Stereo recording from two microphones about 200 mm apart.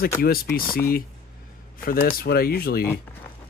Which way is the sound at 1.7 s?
45° left (ahead or behind).